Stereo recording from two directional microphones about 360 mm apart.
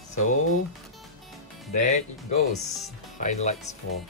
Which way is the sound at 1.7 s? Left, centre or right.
Centre.